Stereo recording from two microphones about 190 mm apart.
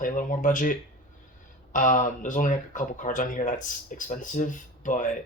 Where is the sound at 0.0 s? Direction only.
45° left (ahead or behind).